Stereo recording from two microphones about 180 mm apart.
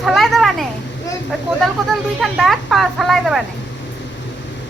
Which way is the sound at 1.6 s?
Centre (ahead or behind).